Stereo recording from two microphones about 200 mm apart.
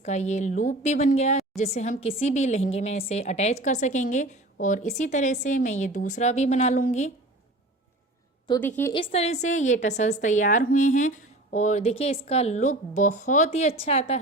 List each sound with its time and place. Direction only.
0.0 s a woman's voice: 35° left (ahead or behind)
8.6 s a woman's voice: 10° left (ahead or behind)
8.9 s a woman's voice: 30° left (ahead or behind)